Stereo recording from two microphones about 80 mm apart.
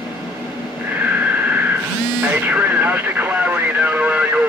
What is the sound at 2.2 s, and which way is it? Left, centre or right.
Radio, centre.